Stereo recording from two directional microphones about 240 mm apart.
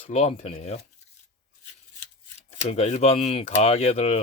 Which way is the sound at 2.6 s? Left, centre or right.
Left.